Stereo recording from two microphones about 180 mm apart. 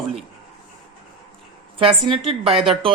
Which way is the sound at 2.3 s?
30° right (ahead or behind).